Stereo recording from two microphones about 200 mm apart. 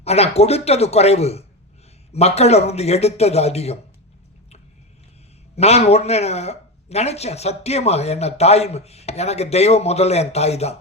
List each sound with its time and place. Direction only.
0.0 s speech: 30° left (ahead or behind)
5.5 s speech: 30° left (ahead or behind)